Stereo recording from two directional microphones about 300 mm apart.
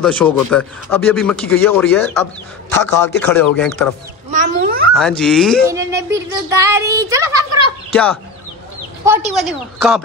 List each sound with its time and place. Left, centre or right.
0.0 s a man's voice: centre
4.3 s speech: right
4.9 s a man's voice: centre
5.7 s speech: centre
7.9 s a man's voice: centre